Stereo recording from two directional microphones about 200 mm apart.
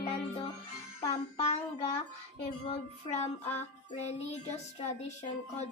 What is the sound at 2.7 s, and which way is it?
Music, 30° left (ahead or behind).